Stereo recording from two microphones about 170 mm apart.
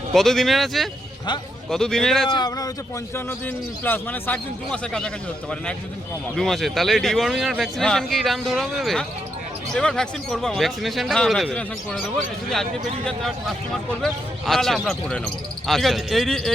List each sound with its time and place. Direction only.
0.1 s speech: centre (ahead or behind)
2.3 s speech: 25° left (ahead or behind)
3.2 s a man's voice: 10° left (ahead or behind)
14.0 s speech: centre (ahead or behind)